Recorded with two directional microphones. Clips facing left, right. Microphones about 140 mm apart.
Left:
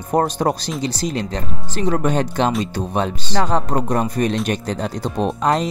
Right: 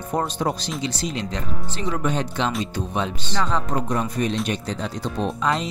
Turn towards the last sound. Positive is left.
turn(degrees=50)  # may be behind; listen again after turning